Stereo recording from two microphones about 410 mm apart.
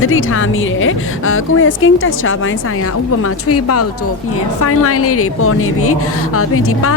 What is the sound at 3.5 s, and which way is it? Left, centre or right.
A woman's voice, left.